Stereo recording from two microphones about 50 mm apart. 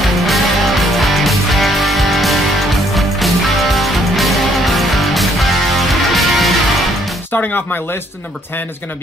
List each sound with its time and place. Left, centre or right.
0.0 s music: centre
7.3 s speech: left